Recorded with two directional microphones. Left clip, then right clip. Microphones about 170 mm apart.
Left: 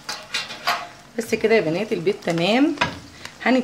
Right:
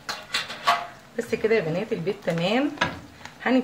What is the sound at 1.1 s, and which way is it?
Speech, 60° left (ahead or behind).